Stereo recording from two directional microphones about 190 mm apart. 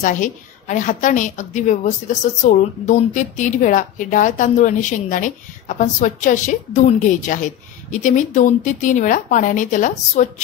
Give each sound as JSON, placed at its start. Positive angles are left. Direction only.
{"t": 0.0, "sound": "speech", "side_deg": 40}